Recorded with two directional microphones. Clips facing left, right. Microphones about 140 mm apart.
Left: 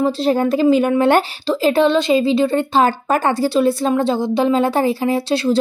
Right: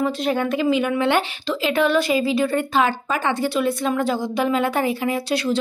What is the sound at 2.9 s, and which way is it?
A woman's voice, 45° left (ahead or behind).